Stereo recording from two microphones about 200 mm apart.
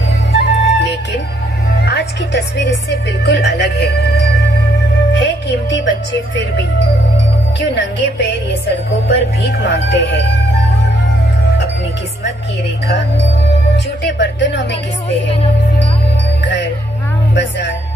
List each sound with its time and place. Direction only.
0.3 s music: 60° left (ahead or behind)
7.6 s music: 60° left (ahead or behind)
14.0 s music: 60° left (ahead or behind)
16.4 s music: 60° left (ahead or behind)